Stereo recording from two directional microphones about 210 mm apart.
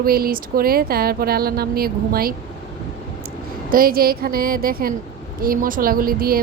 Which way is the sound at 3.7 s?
45° right (ahead or behind).